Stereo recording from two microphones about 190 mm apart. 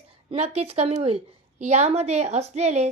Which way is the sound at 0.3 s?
35° right (ahead or behind).